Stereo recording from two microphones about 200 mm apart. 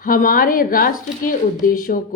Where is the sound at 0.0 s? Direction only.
45° left (ahead or behind).